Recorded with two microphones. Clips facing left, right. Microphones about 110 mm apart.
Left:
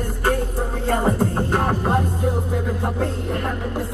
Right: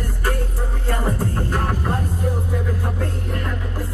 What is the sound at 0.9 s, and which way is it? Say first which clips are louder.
Music: left 4 dB; 25° left (ahead or behind).